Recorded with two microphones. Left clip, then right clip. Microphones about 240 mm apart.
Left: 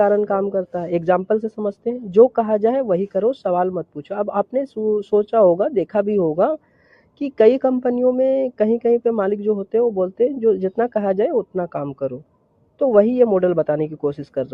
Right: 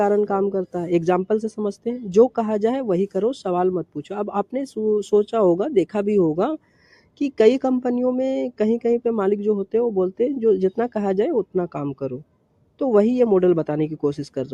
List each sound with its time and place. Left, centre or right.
0.0 s speech: right